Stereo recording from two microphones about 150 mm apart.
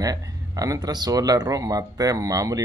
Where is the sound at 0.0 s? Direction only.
25° right (ahead or behind).